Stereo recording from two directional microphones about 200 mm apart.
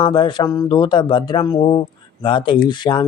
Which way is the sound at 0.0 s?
25° left (ahead or behind).